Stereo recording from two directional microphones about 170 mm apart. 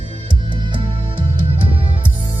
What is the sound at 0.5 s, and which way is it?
Music, 30° right (ahead or behind).